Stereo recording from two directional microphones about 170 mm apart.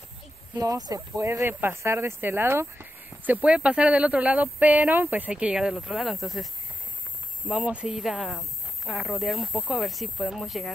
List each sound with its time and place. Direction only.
0.6 s speech: 20° right (ahead or behind); by 10.7 s centre (ahead or behind)